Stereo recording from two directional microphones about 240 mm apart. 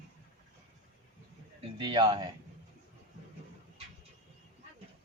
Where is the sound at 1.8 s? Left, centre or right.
Centre.